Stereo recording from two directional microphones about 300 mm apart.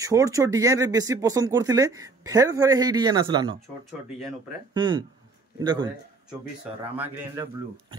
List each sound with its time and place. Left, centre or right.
0.0 s speech: centre
4.7 s speech: centre